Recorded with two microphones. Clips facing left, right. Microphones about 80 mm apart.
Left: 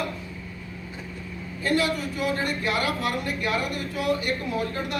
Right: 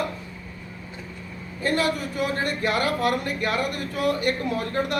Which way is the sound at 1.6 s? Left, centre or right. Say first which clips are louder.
Right 1 dB; right.